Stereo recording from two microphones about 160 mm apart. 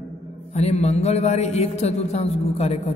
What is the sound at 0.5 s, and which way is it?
A man's voice, 40° left (ahead or behind).